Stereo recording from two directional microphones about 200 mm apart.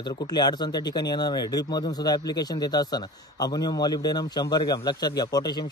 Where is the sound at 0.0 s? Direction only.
20° left (ahead or behind).